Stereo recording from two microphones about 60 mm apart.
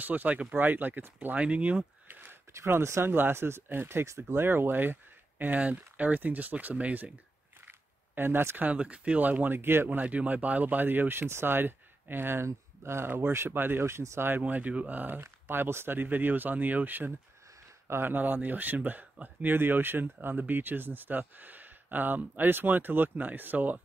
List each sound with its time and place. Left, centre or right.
0.0 s speech: right
1.4 s speech: right
2.5 s speech: right
3.1 s speech: right
7.6 s camera: right
8.6 s speech: right
9.8 s speech: right
14.4 s speech: right